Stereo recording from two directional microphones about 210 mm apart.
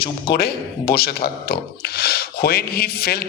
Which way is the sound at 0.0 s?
45° left (ahead or behind).